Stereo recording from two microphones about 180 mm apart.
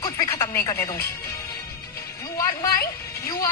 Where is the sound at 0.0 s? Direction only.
20° left (ahead or behind).